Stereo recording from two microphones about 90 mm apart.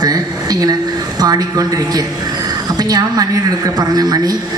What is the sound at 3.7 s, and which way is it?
Speech, 45° right (ahead or behind).